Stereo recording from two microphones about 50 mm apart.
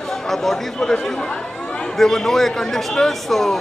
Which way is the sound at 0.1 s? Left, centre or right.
Centre.